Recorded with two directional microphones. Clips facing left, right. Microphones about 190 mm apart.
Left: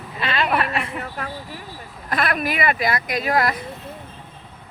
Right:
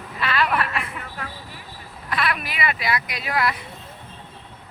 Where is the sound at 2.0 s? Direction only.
45° left (ahead or behind).